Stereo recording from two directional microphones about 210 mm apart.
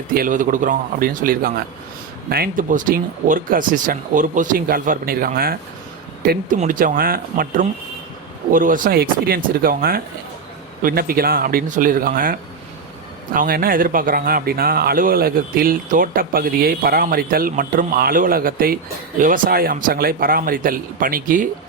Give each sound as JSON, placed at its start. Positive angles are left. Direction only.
{"t": 0.1, "sound": "speech", "side_deg": -40}